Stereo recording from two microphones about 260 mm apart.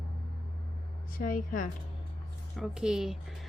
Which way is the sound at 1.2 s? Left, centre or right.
Left.